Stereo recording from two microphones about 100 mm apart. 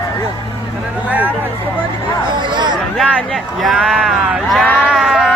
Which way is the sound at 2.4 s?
50° right (ahead or behind).